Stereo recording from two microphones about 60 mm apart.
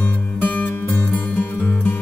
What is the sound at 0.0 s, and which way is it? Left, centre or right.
Music, left.